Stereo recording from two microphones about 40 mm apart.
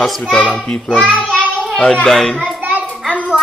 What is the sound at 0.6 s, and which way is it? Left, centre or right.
Speech, left.